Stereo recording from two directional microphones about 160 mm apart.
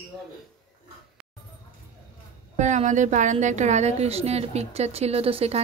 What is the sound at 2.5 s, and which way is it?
A woman's voice, 50° right (ahead or behind).